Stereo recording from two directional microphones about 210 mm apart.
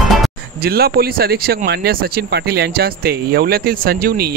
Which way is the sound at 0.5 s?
45° right (ahead or behind).